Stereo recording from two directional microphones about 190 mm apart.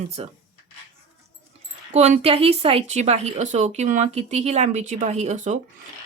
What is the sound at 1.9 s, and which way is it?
Speech, 35° right (ahead or behind).